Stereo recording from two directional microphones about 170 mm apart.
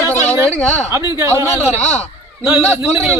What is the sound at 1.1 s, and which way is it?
Speech, 20° right (ahead or behind).